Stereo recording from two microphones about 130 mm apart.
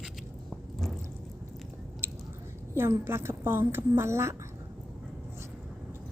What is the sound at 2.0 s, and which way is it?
Chewing, 20° right (ahead or behind).